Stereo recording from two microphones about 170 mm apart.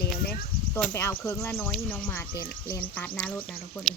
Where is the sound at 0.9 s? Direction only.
15° left (ahead or behind).